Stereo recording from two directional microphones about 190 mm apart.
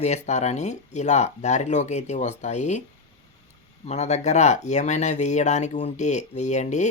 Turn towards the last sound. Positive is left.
turn(degrees=40)  # may be behind; listen again after turning